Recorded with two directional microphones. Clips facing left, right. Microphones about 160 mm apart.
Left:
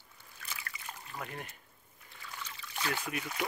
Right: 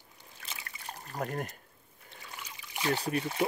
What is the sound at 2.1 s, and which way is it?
Trickle, 35° right (ahead or behind).